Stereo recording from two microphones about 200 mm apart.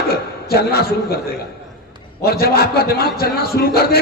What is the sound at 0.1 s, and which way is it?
A man's voice, 50° left (ahead or behind).